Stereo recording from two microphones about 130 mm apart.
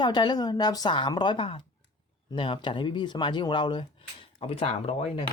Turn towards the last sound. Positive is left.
turn(degrees=55)  # may be behind; listen again after turning